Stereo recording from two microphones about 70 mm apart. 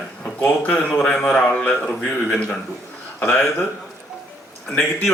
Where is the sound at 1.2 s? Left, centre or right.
Centre.